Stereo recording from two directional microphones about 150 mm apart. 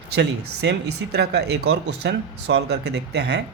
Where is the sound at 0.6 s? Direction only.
90° right.